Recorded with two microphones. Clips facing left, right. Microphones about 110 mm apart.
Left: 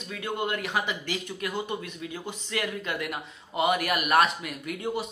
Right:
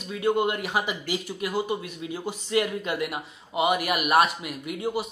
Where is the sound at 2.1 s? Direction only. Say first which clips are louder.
Right 9 dB; 20° right (ahead or behind).